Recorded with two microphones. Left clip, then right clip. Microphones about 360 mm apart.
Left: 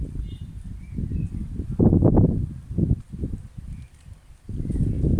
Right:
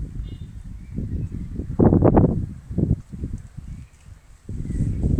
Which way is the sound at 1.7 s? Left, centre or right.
Right.